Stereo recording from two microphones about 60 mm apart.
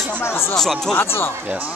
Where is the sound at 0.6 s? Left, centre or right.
Centre.